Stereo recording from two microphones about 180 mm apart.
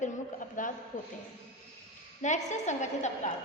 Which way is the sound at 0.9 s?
45° left (ahead or behind).